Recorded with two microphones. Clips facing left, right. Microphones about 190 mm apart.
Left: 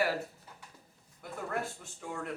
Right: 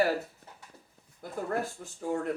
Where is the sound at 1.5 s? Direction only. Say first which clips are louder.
Right 3 dB; 40° right (ahead or behind).